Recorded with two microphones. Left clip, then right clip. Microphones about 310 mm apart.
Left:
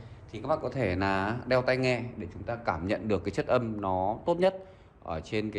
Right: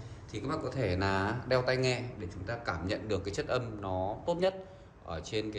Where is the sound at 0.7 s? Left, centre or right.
Left.